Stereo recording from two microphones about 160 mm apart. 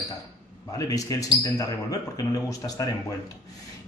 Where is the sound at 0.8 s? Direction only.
20° left (ahead or behind).